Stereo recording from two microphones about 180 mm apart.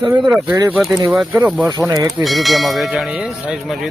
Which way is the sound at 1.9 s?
20° right (ahead or behind).